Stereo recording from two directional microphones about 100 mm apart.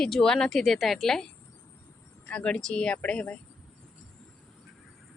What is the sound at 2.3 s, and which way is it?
A woman's voice, 10° left (ahead or behind).